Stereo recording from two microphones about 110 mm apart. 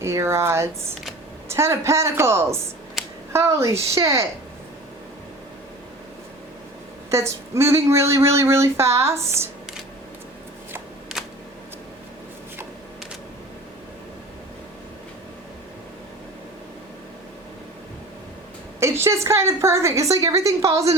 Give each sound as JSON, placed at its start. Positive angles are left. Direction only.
{"t": 0.0, "sound": "speech", "side_deg": -25}
{"t": 3.0, "sound": "a sound", "side_deg": 0}
{"t": 3.3, "sound": "speech", "side_deg": -25}
{"t": 7.1, "sound": "speech", "side_deg": -25}
{"t": 18.8, "sound": "speech", "side_deg": -25}